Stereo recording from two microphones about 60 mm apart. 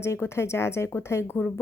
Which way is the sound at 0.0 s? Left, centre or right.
Left.